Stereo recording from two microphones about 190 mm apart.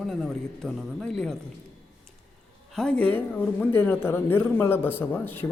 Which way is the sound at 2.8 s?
5° left (ahead or behind).